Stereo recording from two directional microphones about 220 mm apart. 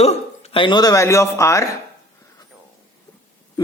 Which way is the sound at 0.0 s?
30° left (ahead or behind).